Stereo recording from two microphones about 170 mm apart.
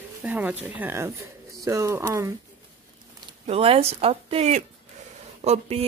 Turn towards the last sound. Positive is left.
turn(degrees=-40)  # may be behind; listen again after turning